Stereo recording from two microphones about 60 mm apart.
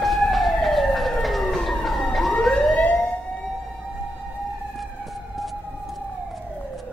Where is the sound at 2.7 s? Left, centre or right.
Left.